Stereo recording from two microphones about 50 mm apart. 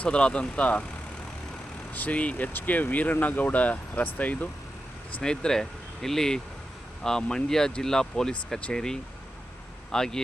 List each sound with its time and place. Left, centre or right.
0.0 s speech: centre
1.9 s speech: left
5.2 s speech: centre